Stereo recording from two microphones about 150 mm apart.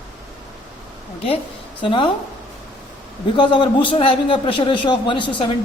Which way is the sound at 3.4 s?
30° left (ahead or behind).